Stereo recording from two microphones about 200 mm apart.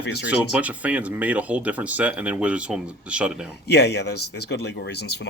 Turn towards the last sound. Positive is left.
turn(degrees=60)  # may be behind; listen again after turning